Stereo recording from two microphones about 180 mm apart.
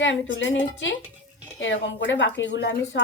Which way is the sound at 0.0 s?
90° left.